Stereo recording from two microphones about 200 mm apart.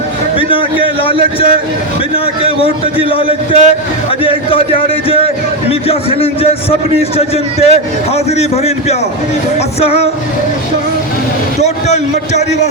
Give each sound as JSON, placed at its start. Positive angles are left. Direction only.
{"t": 0.3, "sound": "a sound", "side_deg": 25}
{"t": 2.1, "sound": "a man's voice", "side_deg": 30}
{"t": 11.6, "sound": "a man's voice", "side_deg": 35}